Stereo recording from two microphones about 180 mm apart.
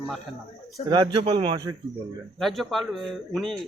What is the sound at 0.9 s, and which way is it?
Speech, 25° right (ahead or behind).